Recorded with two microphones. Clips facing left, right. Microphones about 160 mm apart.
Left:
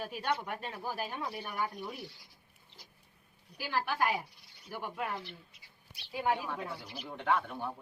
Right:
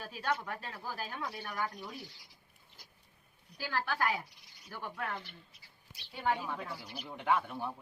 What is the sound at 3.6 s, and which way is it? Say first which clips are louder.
Speech: left 2 dB; 15° left (ahead or behind).